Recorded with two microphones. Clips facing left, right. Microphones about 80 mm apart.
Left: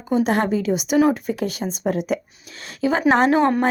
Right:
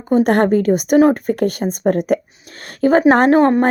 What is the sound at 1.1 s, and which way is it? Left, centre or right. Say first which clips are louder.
Speech: right 7 dB; right.